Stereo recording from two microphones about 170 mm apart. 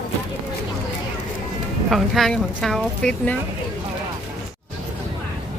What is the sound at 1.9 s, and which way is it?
Speech, centre (ahead or behind).